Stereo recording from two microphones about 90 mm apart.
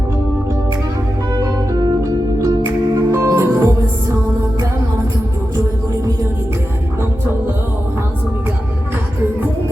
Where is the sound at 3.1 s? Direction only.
30° right (ahead or behind).